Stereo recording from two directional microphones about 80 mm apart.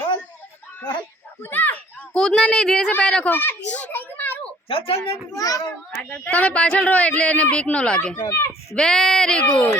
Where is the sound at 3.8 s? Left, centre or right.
Left.